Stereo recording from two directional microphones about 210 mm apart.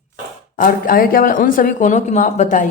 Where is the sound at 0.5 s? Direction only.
40° left (ahead or behind).